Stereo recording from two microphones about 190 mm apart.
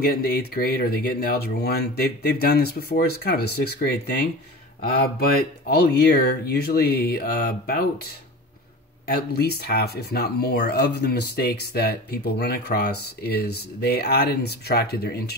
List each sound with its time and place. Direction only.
0.0 s speech: 55° left (ahead or behind)
5.7 s speech: 55° left (ahead or behind)
9.1 s speech: 55° left (ahead or behind)